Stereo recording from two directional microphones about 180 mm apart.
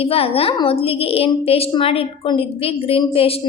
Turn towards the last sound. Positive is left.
turn(degrees=30)  # may be behind; listen again after turning